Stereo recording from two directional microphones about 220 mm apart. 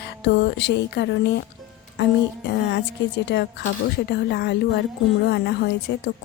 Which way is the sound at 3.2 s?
50° left (ahead or behind).